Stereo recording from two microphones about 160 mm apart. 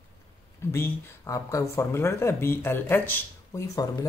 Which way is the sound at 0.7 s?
15° left (ahead or behind).